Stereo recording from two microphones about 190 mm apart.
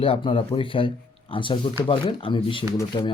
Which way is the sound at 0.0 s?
30° left (ahead or behind).